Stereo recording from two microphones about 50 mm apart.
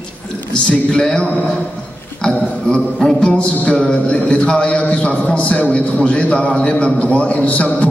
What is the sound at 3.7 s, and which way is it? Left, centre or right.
A man's voice, centre.